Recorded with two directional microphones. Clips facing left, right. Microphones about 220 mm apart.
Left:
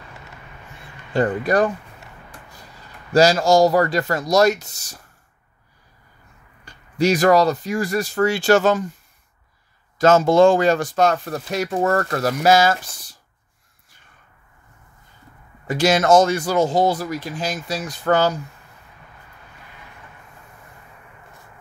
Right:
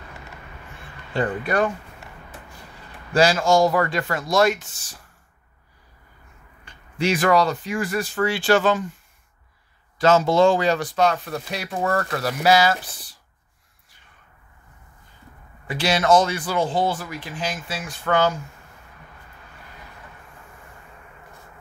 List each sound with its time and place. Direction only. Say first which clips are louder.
1.1 s speech: left 4 dB; 40° left (ahead or behind)
3.1 s speech: left 3 dB; 40° left (ahead or behind)
6.6 s speech: left 5 dB; 40° left (ahead or behind)
9.9 s speech: left 3 dB; 50° left (ahead or behind)
15.6 s speech: left 4 dB; 45° left (ahead or behind)